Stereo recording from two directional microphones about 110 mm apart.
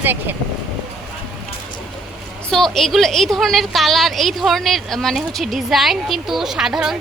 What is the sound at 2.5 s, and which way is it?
A woman's voice, 5° left (ahead or behind).